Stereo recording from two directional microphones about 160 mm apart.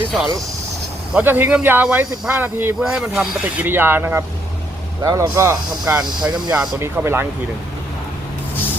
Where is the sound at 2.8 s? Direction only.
5° right (ahead or behind).